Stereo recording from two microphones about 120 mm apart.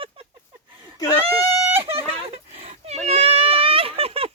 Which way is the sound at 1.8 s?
55° right (ahead or behind).